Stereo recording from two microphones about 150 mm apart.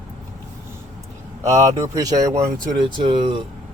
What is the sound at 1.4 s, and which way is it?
Speech, 20° right (ahead or behind).